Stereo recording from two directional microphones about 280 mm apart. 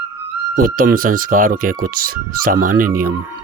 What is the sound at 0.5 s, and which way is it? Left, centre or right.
Speech, right.